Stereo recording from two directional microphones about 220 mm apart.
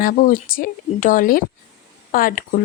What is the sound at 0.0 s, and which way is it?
A woman's voice, 40° left (ahead or behind).